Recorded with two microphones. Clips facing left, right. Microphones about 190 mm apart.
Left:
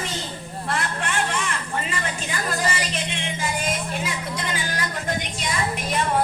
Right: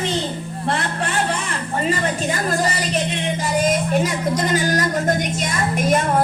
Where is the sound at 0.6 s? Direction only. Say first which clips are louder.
Right 4 dB; 30° right (ahead or behind).